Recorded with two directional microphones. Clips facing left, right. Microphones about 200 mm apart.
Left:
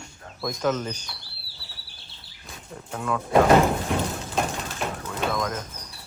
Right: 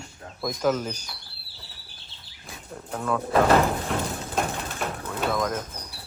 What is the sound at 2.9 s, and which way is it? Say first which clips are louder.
Speech: left 2 dB; centre (ahead or behind).